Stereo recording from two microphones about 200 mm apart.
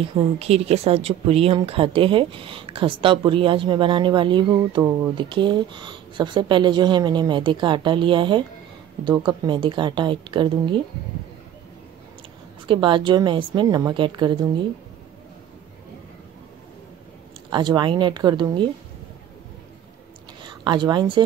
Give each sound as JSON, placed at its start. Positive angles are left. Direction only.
{"t": 0.1, "sound": "speech", "side_deg": -30}
{"t": 12.6, "sound": "speech", "side_deg": -25}
{"t": 17.5, "sound": "speech", "side_deg": -20}
{"t": 20.4, "sound": "speech", "side_deg": -25}